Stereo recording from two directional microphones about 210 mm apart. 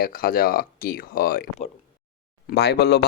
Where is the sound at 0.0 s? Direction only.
40° left (ahead or behind).